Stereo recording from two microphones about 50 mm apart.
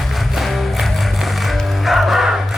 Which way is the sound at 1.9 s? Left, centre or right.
Centre.